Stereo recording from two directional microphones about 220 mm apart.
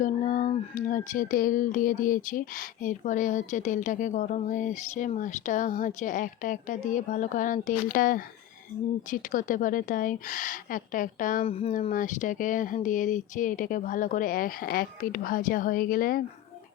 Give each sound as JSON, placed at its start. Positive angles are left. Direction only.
{"t": 0.0, "sound": "speech", "side_deg": 35}